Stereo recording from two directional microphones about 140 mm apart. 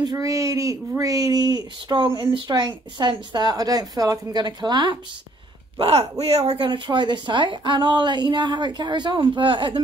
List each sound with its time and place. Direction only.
0.0 s speech: 25° right (ahead or behind)
5.8 s speech: 45° right (ahead or behind)